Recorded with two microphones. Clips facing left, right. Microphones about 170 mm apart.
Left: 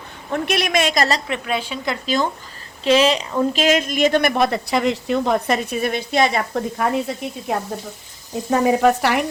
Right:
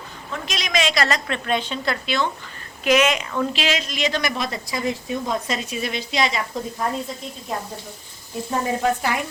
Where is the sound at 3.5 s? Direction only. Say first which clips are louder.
Left 7 dB; 50° left (ahead or behind).